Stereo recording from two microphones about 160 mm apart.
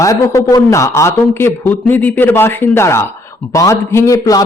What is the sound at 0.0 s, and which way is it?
Speech, 20° left (ahead or behind).